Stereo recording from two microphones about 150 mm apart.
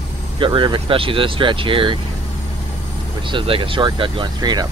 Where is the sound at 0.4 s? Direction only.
35° right (ahead or behind).